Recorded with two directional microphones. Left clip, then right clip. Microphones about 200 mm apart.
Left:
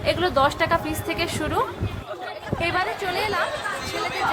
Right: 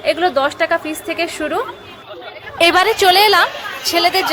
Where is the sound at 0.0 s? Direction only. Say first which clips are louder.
Right 5 dB; 15° right (ahead or behind).